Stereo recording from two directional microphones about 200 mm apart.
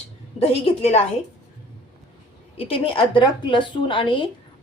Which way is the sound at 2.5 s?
30° left (ahead or behind).